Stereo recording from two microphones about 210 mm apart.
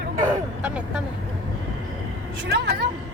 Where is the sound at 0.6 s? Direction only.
5° right (ahead or behind).